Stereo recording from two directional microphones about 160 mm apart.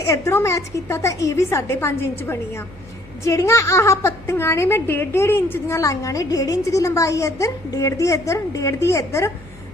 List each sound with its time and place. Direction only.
0.0 s a woman's voice: 15° left (ahead or behind)